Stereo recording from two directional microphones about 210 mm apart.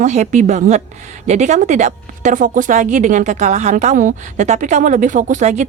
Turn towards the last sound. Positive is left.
turn(degrees=-35)  # may be behind; listen again after turning